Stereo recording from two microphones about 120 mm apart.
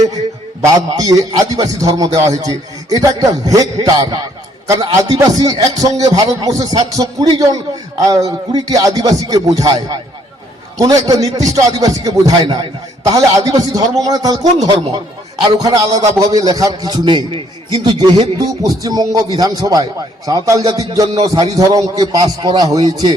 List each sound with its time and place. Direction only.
0.6 s a man's voice: 30° right (ahead or behind)